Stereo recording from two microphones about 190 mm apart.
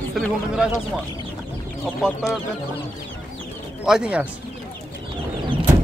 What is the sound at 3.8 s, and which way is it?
Speech, 5° right (ahead or behind).